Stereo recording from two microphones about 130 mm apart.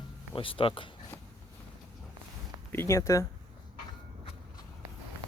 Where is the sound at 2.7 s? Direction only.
20° left (ahead or behind).